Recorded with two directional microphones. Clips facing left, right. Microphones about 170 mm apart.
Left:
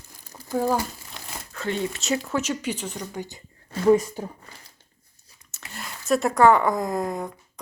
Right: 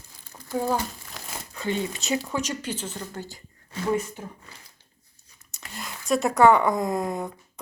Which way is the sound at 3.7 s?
35° left (ahead or behind).